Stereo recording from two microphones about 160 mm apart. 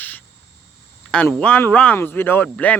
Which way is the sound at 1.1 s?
10° left (ahead or behind).